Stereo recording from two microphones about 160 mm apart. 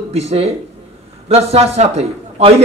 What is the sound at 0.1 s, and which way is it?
A man's voice, 40° right (ahead or behind).